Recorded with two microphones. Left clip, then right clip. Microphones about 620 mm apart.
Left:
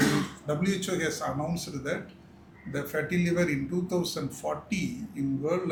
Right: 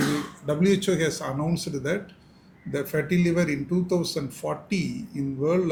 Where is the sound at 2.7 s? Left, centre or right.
Right.